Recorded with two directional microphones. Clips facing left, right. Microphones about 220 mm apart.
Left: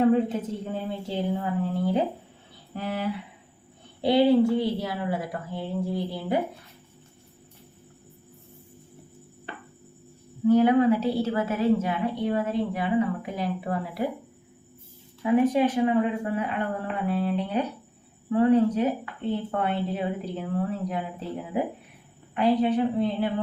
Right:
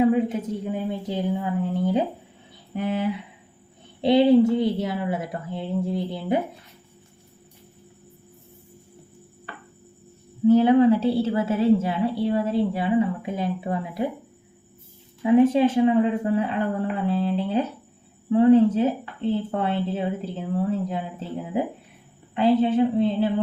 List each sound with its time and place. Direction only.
0.0 s a sound: 10° right (ahead or behind)
2.7 s a woman's voice: 20° right (ahead or behind)
9.5 s music: 25° left (ahead or behind)
10.4 s a woman's voice: 25° right (ahead or behind)
15.2 s a woman's voice: 25° right (ahead or behind)
22.4 s a woman's voice: 25° right (ahead or behind)